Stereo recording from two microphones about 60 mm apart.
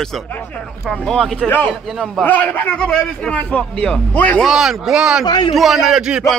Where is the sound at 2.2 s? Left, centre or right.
Left.